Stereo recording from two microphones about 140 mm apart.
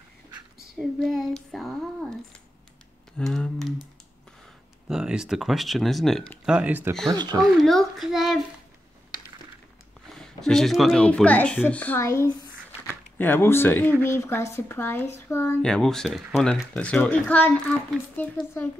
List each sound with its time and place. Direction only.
0.7 s speech: centre (ahead or behind)
3.2 s speech: 5° left (ahead or behind)
4.8 s speech: 5° right (ahead or behind)
7.2 s a child's voice: 30° right (ahead or behind)
7.6 s speech: centre (ahead or behind)
10.1 s speech: 5° left (ahead or behind)
15.6 s speech: 5° left (ahead or behind)